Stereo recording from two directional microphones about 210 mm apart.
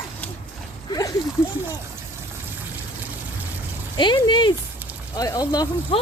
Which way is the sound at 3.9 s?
20° left (ahead or behind).